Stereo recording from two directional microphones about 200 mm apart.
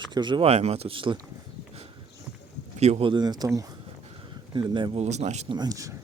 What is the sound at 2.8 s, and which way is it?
Speech, 30° right (ahead or behind).